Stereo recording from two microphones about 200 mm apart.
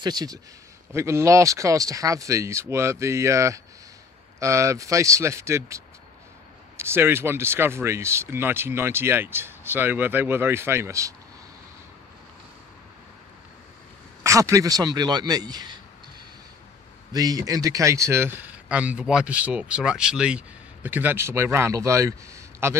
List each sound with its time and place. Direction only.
0.0 s speech: 20° right (ahead or behind)
6.8 s speech: 10° right (ahead or behind)
14.2 s speech: 15° right (ahead or behind)
17.1 s speech: 20° right (ahead or behind)